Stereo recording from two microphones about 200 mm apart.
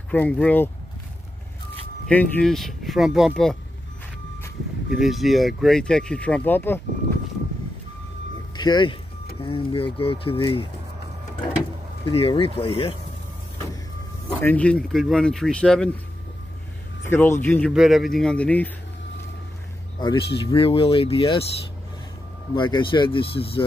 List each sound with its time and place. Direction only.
0.1 s speech: 10° left (ahead or behind)
2.0 s speech: 5° left (ahead or behind)
4.9 s speech: centre (ahead or behind)
8.5 s speech: 20° left (ahead or behind)
12.0 s speech: 30° left (ahead or behind)
14.4 s speech: 5° left (ahead or behind)
17.0 s speech: 10° left (ahead or behind)
20.0 s speech: 25° left (ahead or behind)
22.5 s speech: 25° left (ahead or behind)